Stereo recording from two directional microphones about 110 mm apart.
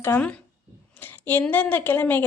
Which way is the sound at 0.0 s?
15° left (ahead or behind).